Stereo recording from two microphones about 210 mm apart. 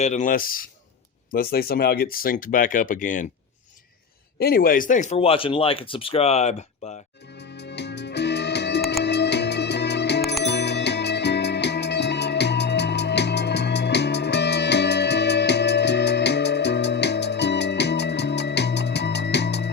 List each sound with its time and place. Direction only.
0.0 s speech: 35° left (ahead or behind)
4.4 s speech: 45° left (ahead or behind)
7.6 s music: 55° left (ahead or behind)